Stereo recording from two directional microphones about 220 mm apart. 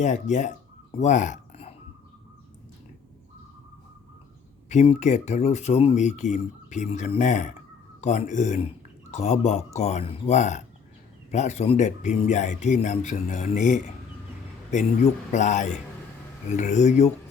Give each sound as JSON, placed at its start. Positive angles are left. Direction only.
{"t": 0.0, "sound": "speech", "side_deg": 35}
{"t": 4.7, "sound": "speech", "side_deg": 30}